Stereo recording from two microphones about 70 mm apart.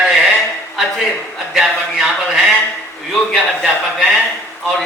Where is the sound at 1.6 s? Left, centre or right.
Centre.